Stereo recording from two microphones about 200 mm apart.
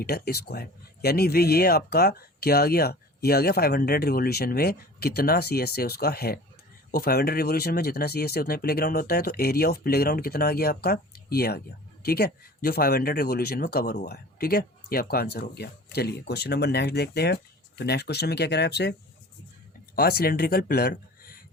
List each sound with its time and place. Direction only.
0.0 s speech: 50° left (ahead or behind)
20.0 s speech: 50° left (ahead or behind)